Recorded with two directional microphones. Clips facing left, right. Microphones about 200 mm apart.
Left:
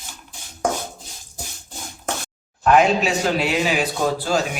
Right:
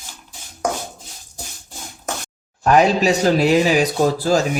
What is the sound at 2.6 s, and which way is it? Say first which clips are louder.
Speech: right 2 dB; 40° right (ahead or behind).